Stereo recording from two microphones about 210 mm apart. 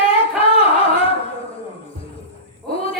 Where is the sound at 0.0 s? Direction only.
25° left (ahead or behind).